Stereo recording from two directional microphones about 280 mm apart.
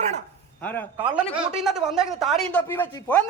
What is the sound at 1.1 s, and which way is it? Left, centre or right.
Speech, centre.